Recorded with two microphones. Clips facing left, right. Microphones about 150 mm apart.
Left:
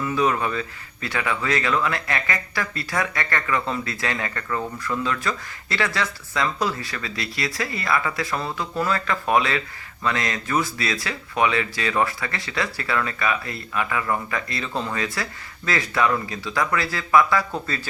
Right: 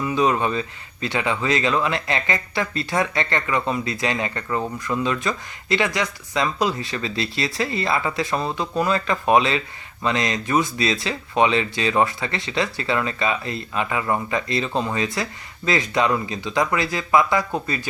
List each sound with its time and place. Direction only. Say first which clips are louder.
0.0 s speech: right 2 dB; 20° right (ahead or behind)